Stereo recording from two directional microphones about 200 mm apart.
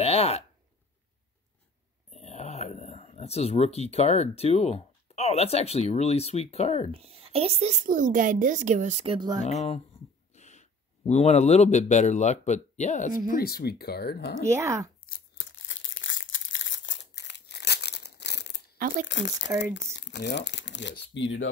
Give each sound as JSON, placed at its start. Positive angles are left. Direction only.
{"t": 0.0, "sound": "a sound", "side_deg": 30}
{"t": 2.0, "sound": "speech", "side_deg": 35}
{"t": 6.9, "sound": "a woman's voice", "side_deg": -30}
{"t": 9.5, "sound": "speech", "side_deg": 35}
{"t": 13.3, "sound": "speech", "side_deg": 50}
{"t": 14.4, "sound": "speech", "side_deg": -15}
{"t": 15.0, "sound": "tearing", "side_deg": 50}
{"t": 15.5, "sound": "crumpling", "side_deg": 70}
{"t": 18.8, "sound": "speech", "side_deg": -45}
{"t": 19.0, "sound": "speech", "side_deg": 65}